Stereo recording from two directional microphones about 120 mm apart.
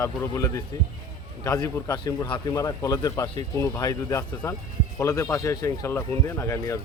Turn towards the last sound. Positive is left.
turn(degrees=25)  # may be behind; listen again after turning